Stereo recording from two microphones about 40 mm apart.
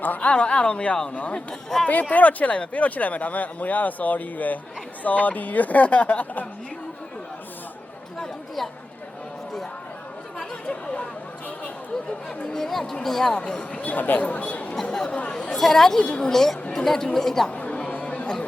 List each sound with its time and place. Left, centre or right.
0.0 s speech: left
0.3 s speech: left
12.5 s a woman's voice: centre
13.8 s speech: left
15.5 s a woman's voice: centre
17.5 s chatter: left